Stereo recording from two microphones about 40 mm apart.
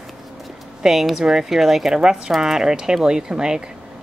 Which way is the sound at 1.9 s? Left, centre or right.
Centre.